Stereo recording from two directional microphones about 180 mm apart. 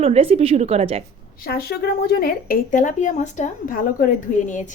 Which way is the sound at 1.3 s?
55° left (ahead or behind).